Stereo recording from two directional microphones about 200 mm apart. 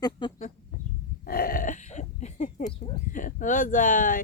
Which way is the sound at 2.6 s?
20° left (ahead or behind).